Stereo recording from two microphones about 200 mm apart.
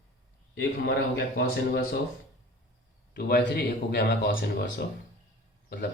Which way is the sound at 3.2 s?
55° left (ahead or behind).